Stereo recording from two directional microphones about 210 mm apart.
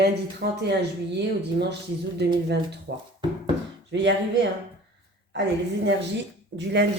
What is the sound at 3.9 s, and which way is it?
A woman's voice, 55° right (ahead or behind).